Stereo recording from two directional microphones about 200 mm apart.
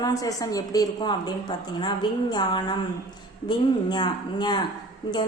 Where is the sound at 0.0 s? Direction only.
15° left (ahead or behind).